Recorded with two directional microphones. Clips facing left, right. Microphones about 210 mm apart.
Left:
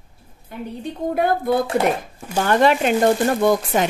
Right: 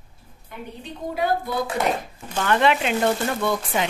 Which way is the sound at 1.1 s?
55° left (ahead or behind).